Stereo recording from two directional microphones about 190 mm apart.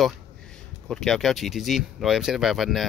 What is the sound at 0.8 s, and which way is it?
Speech, centre (ahead or behind).